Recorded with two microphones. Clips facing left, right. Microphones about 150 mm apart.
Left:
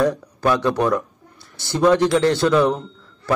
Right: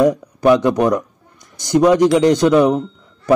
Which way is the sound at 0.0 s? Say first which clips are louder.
Right 6 dB; 15° right (ahead or behind).